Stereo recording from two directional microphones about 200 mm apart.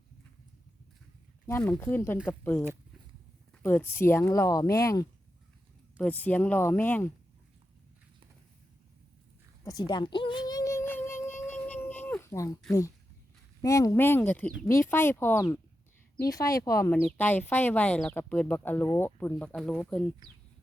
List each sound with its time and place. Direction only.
1.5 s speech: 10° left (ahead or behind)
9.6 s a sound: 20° left (ahead or behind)
13.6 s speech: 15° left (ahead or behind)
16.9 s speech: 5° left (ahead or behind)